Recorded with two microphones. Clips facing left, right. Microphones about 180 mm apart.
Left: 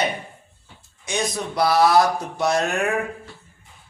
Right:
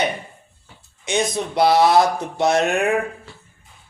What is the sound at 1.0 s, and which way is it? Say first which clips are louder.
Speech: right 4 dB; 25° right (ahead or behind).